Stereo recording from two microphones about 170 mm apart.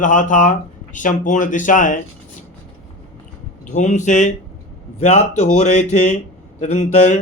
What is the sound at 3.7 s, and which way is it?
Speech, 45° left (ahead or behind).